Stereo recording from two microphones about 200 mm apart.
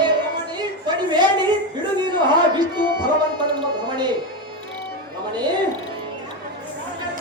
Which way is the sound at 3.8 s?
20° right (ahead or behind).